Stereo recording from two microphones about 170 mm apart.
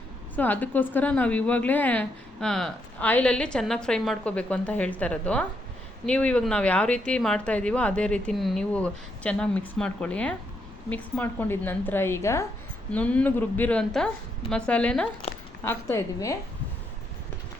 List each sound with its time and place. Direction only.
0.3 s a woman's voice: 10° left (ahead or behind)